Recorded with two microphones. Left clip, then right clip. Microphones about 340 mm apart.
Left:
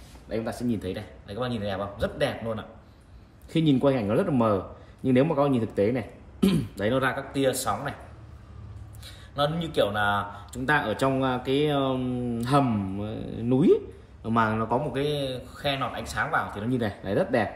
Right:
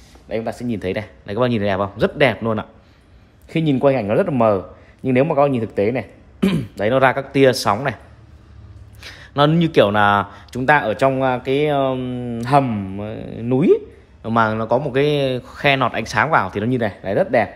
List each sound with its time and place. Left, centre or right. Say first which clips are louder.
0.3 s speech: right 7 dB; centre
0.7 s speech: right 8 dB; centre
3.4 s speech: right 4 dB; centre
4.1 s speech: right 7 dB; centre
5.1 s speech: right 7 dB; centre
6.9 s speech: right 11 dB; centre
9.0 s speech: right 10 dB; centre
10.8 s speech: right 8 dB; centre
13.0 s speech: right 6 dB; centre
13.5 s speech: right 6 dB; centre
14.2 s speech: right 7 dB; centre
17.2 s speech: right 9 dB; centre